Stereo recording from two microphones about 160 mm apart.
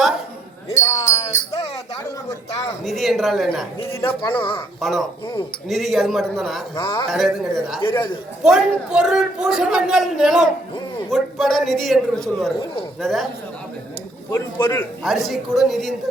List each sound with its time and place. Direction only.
0.7 s a sound: 20° left (ahead or behind)
2.8 s a man's voice: centre (ahead or behind)
4.2 s speech: 30° left (ahead or behind)
4.8 s a man's voice: centre (ahead or behind)
6.7 s speech: 25° left (ahead or behind)
7.1 s a man's voice: centre (ahead or behind)
14.3 s a man's voice: 20° left (ahead or behind)
15.0 s a man's voice: centre (ahead or behind)